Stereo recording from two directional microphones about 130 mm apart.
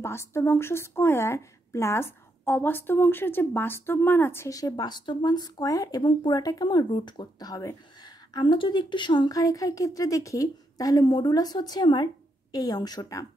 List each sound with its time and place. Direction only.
0.0 s a woman's voice: 20° left (ahead or behind)